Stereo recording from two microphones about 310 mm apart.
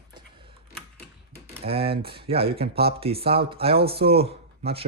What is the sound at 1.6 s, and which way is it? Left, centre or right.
Speech, centre.